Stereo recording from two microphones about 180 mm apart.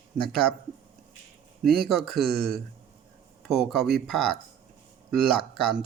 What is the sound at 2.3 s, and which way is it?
Speech, 60° right (ahead or behind).